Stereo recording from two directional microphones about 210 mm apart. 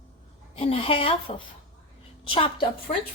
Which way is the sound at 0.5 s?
25° left (ahead or behind).